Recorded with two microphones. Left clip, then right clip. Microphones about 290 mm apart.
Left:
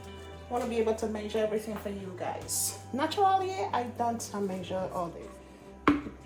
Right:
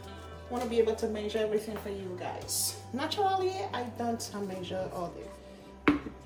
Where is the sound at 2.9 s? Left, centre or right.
Left.